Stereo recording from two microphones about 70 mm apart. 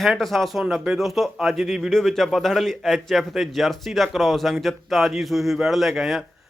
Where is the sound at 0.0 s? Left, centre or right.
Centre.